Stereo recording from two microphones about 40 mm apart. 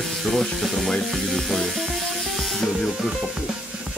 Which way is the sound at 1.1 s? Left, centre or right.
Centre.